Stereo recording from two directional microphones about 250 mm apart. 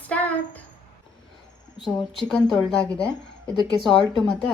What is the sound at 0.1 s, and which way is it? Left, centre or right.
Child singing, centre.